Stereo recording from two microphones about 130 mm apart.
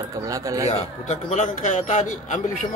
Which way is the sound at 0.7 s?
70° left (ahead or behind).